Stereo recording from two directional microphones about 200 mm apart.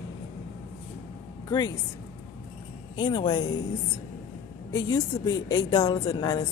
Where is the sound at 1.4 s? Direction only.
20° left (ahead or behind).